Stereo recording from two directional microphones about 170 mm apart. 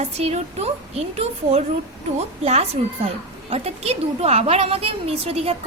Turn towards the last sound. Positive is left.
turn(degrees=-35)  # may be behind; listen again after turning